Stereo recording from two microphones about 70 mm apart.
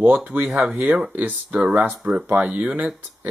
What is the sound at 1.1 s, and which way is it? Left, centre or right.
Speech, right.